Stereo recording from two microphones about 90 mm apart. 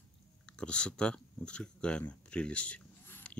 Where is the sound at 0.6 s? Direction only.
10° left (ahead or behind).